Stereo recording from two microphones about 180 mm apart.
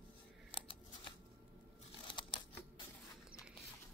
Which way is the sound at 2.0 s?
30° left (ahead or behind).